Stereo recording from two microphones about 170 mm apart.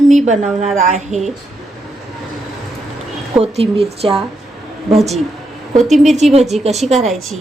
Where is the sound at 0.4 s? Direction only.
Centre (ahead or behind).